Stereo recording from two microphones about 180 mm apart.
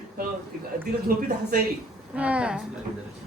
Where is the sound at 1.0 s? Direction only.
55° right (ahead or behind).